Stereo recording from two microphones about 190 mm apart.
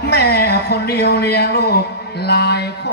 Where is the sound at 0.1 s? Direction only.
55° left (ahead or behind).